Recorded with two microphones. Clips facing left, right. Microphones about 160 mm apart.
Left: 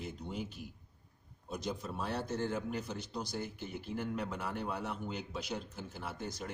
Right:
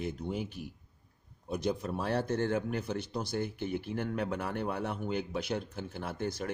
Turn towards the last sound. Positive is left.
turn(degrees=-60)  # may be behind; listen again after turning